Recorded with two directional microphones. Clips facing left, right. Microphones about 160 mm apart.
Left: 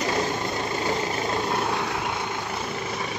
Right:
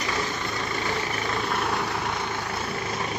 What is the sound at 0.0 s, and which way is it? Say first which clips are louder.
Vehicle: left 4 dB; 40° left (ahead or behind).